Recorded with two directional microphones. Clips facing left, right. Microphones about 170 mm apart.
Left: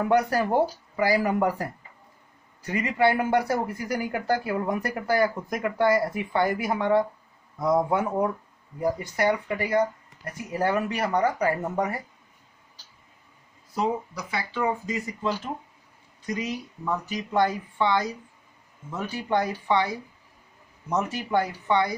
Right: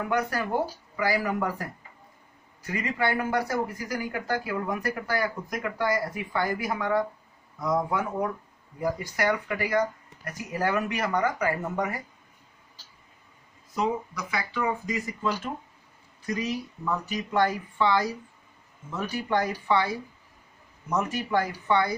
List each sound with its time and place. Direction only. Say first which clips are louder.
0.1 s speech: left 5 dB; 30° left (ahead or behind)
13.7 s speech: left 1 dB; 30° left (ahead or behind)